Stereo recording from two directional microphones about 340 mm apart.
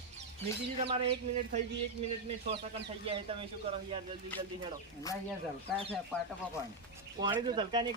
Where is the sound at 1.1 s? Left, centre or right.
Centre.